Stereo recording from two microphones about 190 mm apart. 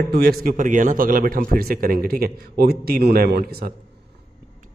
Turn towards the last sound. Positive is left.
turn(degrees=-55)  # may be behind; listen again after turning